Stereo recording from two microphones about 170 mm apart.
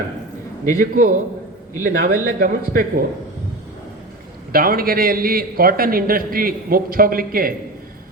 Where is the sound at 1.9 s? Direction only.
50° right (ahead or behind).